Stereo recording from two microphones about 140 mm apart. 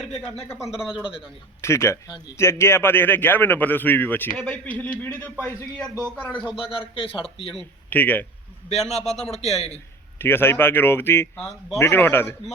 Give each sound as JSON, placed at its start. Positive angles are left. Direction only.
{"t": 0.6, "sound": "speech", "side_deg": -5}
{"t": 1.6, "sound": "speech", "side_deg": 20}
{"t": 6.4, "sound": "speech", "side_deg": -5}
{"t": 6.7, "sound": "speech", "side_deg": 40}
{"t": 7.5, "sound": "a man's voice", "side_deg": 10}
{"t": 8.8, "sound": "speech", "side_deg": 0}
{"t": 9.3, "sound": "a man's voice", "side_deg": 50}
{"t": 10.2, "sound": "speech", "side_deg": 15}